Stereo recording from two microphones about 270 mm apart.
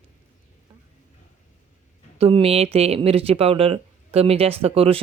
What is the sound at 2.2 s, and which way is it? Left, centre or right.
Speech, right.